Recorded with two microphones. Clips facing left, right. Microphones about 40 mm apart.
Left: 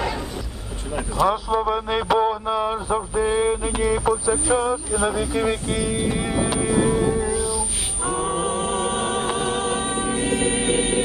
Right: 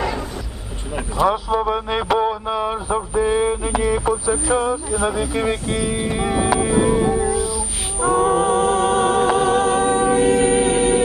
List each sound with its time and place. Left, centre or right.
0.9 s vehicle: right
1.3 s speech: centre
5.7 s music: centre
7.3 s music: centre
8.0 s music: right
10.5 s music: left